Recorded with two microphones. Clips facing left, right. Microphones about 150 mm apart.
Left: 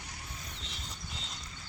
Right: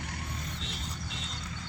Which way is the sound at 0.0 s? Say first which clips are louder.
Right 8 dB; 60° right (ahead or behind).